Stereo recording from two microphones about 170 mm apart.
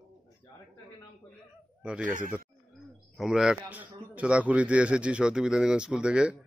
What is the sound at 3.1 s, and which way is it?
A man's voice, 5° right (ahead or behind).